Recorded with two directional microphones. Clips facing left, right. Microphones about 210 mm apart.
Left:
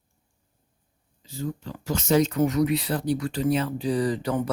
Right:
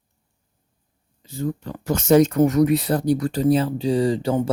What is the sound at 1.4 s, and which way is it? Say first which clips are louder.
Speech: right 5 dB; 55° right (ahead or behind).